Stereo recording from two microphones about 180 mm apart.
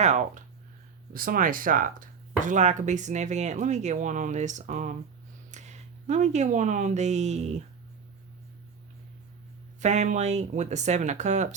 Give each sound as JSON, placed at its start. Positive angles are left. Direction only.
{"t": 0.0, "sound": "speech", "side_deg": -40}
{"t": 1.1, "sound": "speech", "side_deg": -50}
{"t": 9.8, "sound": "speech", "side_deg": -40}